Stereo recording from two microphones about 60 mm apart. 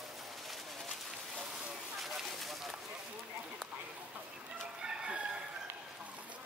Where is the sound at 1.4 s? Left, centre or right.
Centre.